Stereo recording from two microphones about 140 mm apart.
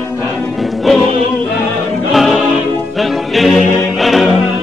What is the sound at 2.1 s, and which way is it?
Music, centre (ahead or behind).